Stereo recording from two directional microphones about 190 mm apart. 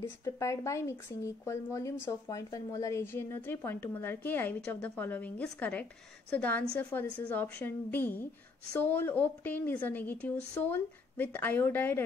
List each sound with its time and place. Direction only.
0.2 s a woman's voice: 15° left (ahead or behind)